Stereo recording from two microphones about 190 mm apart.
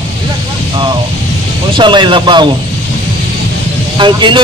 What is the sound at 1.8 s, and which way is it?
Speech, 25° right (ahead or behind).